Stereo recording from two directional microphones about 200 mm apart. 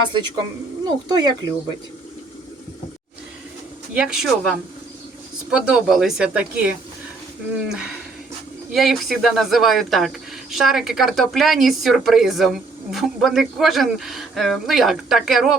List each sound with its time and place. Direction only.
0.1 s speech: 20° right (ahead or behind)
3.9 s speech: 5° right (ahead or behind)